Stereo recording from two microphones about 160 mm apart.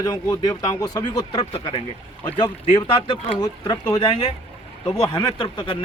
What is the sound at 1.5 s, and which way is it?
Speech, 35° left (ahead or behind).